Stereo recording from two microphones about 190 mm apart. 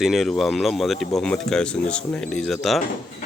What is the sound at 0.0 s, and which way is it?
Speech, centre (ahead or behind).